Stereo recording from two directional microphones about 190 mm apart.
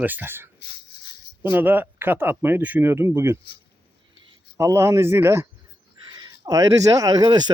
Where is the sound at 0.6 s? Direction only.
60° left (ahead or behind).